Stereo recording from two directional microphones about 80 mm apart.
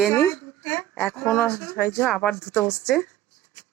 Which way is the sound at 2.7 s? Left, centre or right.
Centre.